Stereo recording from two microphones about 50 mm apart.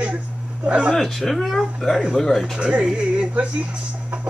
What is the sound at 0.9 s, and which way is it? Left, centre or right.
Speech, centre.